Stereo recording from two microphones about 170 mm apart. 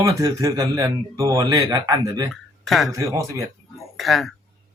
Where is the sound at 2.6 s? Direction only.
Centre (ahead or behind).